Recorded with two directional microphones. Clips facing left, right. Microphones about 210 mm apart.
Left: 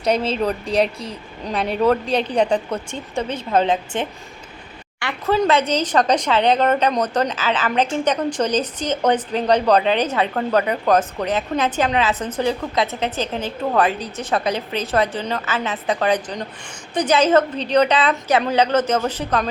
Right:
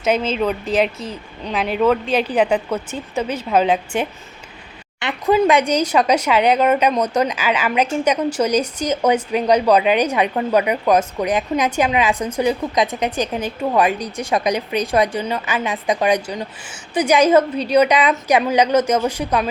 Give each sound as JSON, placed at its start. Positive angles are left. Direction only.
{"t": 0.3, "sound": "a woman's voice", "side_deg": -5}